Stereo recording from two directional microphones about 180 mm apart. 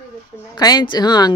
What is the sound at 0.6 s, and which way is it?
Speech, 25° left (ahead or behind).